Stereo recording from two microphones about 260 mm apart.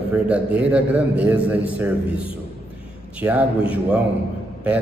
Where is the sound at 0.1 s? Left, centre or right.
Centre.